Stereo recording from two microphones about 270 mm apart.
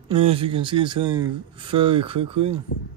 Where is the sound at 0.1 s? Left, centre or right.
Right.